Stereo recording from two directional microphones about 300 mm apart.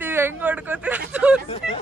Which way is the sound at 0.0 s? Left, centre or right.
Centre.